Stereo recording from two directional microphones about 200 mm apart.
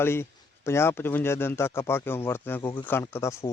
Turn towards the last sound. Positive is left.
turn(degrees=15)  # may be behind; listen again after turning